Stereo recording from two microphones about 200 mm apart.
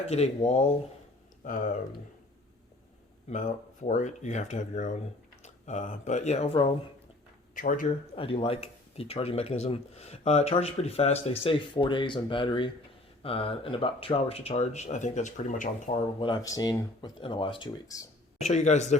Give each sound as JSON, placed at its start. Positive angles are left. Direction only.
{"t": 0.1, "sound": "speech", "side_deg": 30}
{"t": 1.5, "sound": "speech", "side_deg": 40}
{"t": 3.2, "sound": "speech", "side_deg": 40}
{"t": 7.5, "sound": "speech", "side_deg": 40}
{"t": 8.1, "sound": "speech", "side_deg": 30}
{"t": 18.3, "sound": "speech", "side_deg": 35}